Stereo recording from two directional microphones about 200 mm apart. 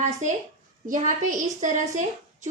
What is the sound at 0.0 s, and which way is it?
A woman's voice, 35° right (ahead or behind).